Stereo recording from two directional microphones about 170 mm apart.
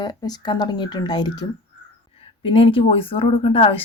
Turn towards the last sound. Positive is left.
turn(degrees=35)  # may be behind; listen again after turning